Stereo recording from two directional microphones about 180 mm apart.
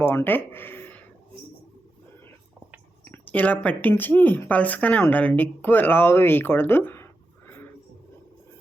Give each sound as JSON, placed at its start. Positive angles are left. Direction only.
{"t": 0.0, "sound": "speech", "side_deg": 15}
{"t": 3.0, "sound": "speech", "side_deg": 10}